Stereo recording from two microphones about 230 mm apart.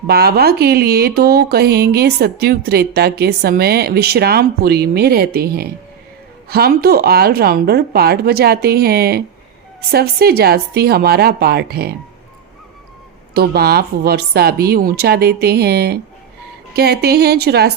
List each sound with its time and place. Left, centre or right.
0.1 s speech: right
13.3 s speech: right